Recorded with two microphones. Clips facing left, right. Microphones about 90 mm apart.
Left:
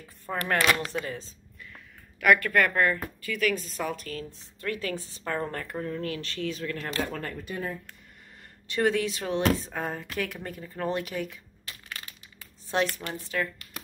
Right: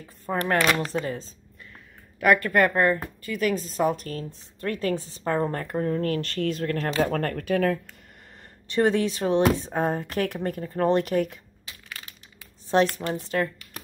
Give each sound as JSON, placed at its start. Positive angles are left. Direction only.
{"t": 0.0, "sound": "speech", "side_deg": -25}
{"t": 7.1, "sound": "speech", "side_deg": -55}
{"t": 8.7, "sound": "speech", "side_deg": -30}
{"t": 10.7, "sound": "speech", "side_deg": -30}
{"t": 11.0, "sound": "speech", "side_deg": -45}
{"t": 12.7, "sound": "speech", "side_deg": -30}